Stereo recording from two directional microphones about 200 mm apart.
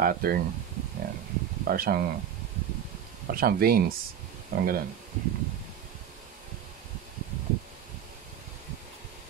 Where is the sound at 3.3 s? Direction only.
50° right (ahead or behind).